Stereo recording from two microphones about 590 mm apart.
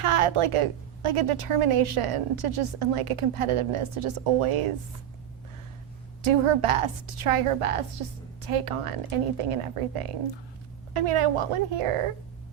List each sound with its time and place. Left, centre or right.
0.0 s a woman's voice: right
6.2 s a woman's voice: right